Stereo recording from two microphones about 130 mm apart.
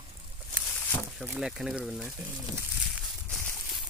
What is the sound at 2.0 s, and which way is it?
Speech, 20° right (ahead or behind).